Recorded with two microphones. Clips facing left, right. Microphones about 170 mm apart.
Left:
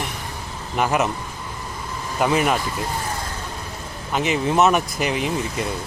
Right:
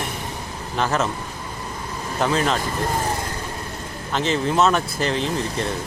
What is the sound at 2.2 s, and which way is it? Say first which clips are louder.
Speech: left 2 dB; 10° left (ahead or behind).